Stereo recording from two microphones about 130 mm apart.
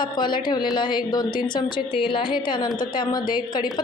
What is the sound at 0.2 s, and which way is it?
A woman's voice, 35° left (ahead or behind).